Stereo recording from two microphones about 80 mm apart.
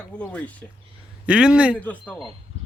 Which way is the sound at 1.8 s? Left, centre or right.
Centre.